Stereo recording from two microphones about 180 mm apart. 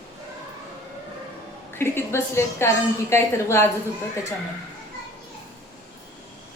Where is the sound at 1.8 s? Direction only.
15° left (ahead or behind).